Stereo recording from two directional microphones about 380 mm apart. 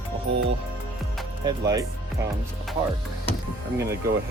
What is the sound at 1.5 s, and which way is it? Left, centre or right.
Speech, centre.